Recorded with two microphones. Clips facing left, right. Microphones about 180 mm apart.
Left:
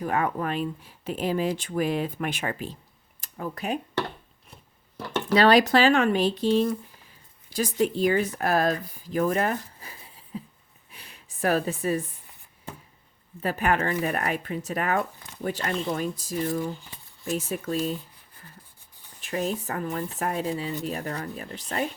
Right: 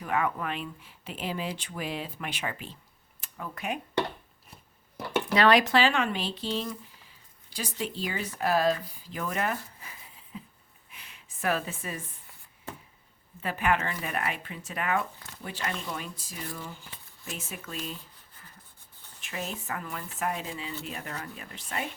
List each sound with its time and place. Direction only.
0.0 s speech: 40° left (ahead or behind)
3.2 s a sound: 40° left (ahead or behind)
5.3 s speech: 35° left (ahead or behind)
10.9 s a sound: 35° left (ahead or behind)
13.4 s speech: 40° left (ahead or behind)
19.2 s speech: 40° left (ahead or behind)